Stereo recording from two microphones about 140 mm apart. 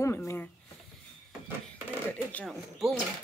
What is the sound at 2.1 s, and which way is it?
Speech, 10° left (ahead or behind).